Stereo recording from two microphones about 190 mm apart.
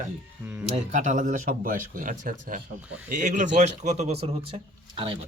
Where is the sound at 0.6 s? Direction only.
40° right (ahead or behind).